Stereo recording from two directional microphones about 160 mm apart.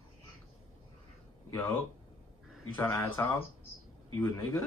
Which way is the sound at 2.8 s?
15° left (ahead or behind).